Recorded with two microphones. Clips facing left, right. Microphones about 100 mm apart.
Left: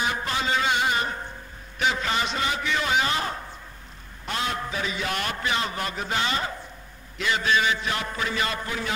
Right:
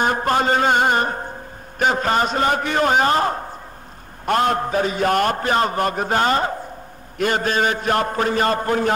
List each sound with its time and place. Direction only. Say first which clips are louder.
0.0 s a man's voice: right 9 dB; 50° right (ahead or behind)